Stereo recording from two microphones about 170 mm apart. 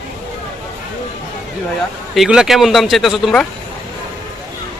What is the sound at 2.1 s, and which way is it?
Speech, 5° right (ahead or behind).